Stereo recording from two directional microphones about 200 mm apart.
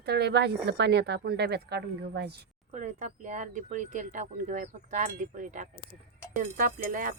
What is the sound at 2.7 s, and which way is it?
Speech, 35° right (ahead or behind).